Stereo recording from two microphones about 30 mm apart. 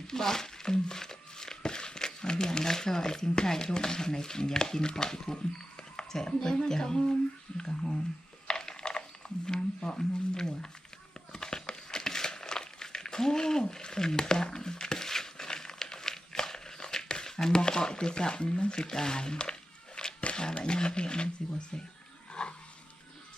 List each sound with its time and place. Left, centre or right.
0.1 s crumpling: centre
3.3 s speech: centre
8.4 s a sound: left
9.5 s speech: left
11.3 s crumpling: left
18.8 s speech: left
20.0 s cat: left
20.3 s a sound: left
20.7 s speech: left
22.3 s dog: left